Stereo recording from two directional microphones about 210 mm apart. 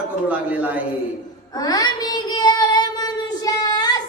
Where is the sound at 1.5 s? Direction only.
20° left (ahead or behind).